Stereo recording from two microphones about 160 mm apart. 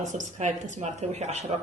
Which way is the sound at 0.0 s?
50° right (ahead or behind).